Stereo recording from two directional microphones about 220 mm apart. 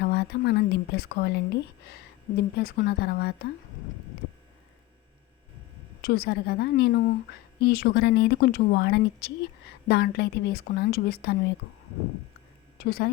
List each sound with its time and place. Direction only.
0.0 s speech: 50° left (ahead or behind)
6.0 s speech: 45° left (ahead or behind)
12.8 s a woman's voice: 45° left (ahead or behind)